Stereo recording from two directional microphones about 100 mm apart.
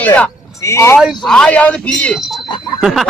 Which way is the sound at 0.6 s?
30° left (ahead or behind).